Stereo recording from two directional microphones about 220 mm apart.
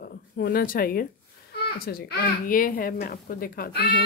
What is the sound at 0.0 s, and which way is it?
A child's voice, 45° left (ahead or behind).